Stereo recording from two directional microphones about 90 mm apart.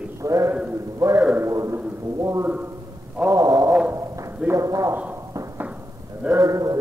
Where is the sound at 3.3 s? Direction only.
45° right (ahead or behind).